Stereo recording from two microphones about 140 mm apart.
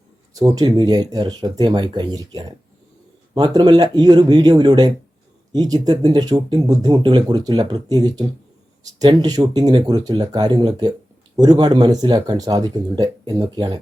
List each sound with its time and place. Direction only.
0.3 s speech: 25° right (ahead or behind)